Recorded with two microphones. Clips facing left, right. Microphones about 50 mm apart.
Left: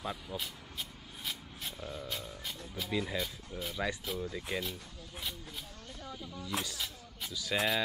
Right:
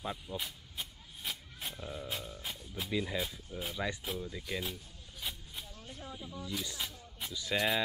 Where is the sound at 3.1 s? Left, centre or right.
Centre.